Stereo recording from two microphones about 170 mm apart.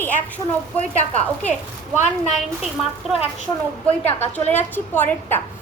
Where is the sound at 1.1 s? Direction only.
10° left (ahead or behind).